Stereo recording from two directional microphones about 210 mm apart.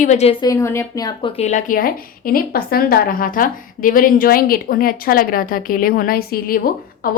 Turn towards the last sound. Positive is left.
turn(degrees=45)  # may be behind; listen again after turning